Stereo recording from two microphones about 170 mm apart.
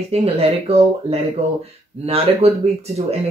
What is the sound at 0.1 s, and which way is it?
Speech, 35° right (ahead or behind).